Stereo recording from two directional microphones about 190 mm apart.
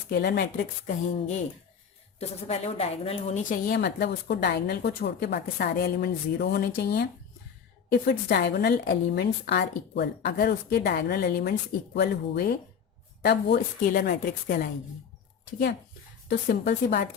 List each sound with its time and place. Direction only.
0.1 s a woman's voice: 55° left (ahead or behind)
0.5 s speech: 40° left (ahead or behind)
3.7 s a woman's voice: 60° left (ahead or behind)
16.5 s a woman's voice: 50° left (ahead or behind)